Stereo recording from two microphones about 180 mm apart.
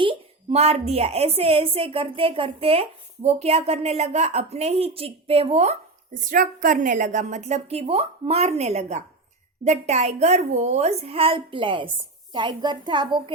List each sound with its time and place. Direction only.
0.0 s a woman's voice: 30° right (ahead or behind)
6.1 s a woman's voice: 50° right (ahead or behind); by 13.3 s 25° right (ahead or behind)